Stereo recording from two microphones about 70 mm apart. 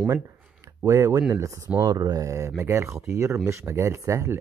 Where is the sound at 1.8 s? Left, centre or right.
Right.